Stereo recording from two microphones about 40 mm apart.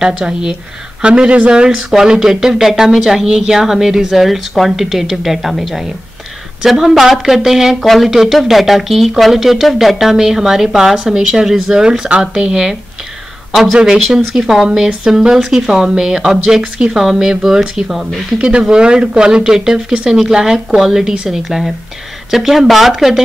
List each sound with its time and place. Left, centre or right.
0.2 s speech: right
1.7 s a woman's voice: centre
3.0 s speech: centre
3.3 s a woman's voice: centre
18.4 s a woman's voice: right; by 23.2 s centre